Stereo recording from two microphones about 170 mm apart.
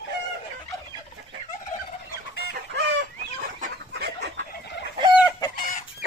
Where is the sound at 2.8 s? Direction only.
90° right.